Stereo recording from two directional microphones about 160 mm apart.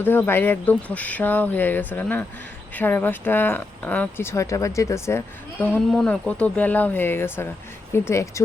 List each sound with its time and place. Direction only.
0.0 s speech: 15° left (ahead or behind)